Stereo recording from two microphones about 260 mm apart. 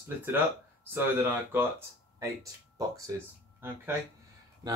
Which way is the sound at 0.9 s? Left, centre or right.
Centre.